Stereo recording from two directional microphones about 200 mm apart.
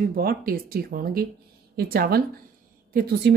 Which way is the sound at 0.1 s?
45° right (ahead or behind).